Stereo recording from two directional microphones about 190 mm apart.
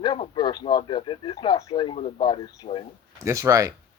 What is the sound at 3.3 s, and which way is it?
Speech, 15° right (ahead or behind).